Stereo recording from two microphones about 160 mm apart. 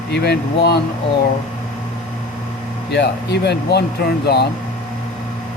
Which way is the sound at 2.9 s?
90° left.